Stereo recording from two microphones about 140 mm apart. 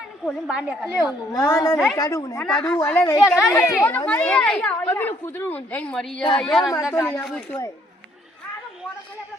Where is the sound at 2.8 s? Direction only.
10° left (ahead or behind).